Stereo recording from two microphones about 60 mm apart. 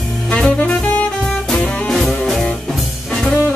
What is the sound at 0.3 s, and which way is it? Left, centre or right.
Saxophone, centre.